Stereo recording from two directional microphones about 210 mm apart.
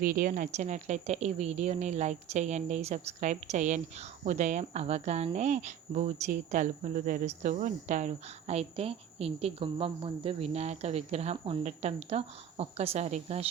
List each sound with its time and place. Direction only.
0.0 s speech: 40° right (ahead or behind)